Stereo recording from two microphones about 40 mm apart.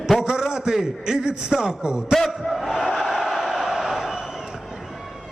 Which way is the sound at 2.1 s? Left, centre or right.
Centre.